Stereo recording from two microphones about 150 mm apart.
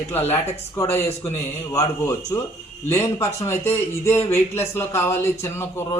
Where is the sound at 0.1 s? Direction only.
15° left (ahead or behind).